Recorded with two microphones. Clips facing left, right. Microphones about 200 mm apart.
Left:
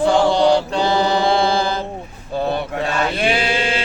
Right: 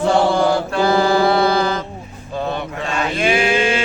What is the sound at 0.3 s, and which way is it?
Mantra, 20° left (ahead or behind).